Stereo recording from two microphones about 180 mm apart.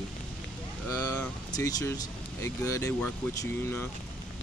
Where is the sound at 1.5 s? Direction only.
15° left (ahead or behind).